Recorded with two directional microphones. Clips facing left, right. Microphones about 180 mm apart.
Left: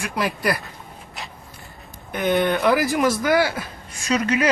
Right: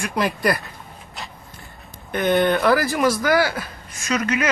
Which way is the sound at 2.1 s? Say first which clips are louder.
Right 2 dB; 10° left (ahead or behind).